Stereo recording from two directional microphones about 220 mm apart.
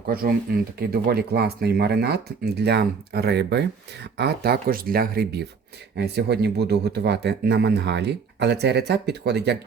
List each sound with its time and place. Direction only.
0.1 s speech: 45° right (ahead or behind)